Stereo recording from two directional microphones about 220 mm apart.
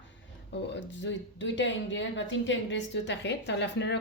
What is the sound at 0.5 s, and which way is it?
Speech, 55° left (ahead or behind).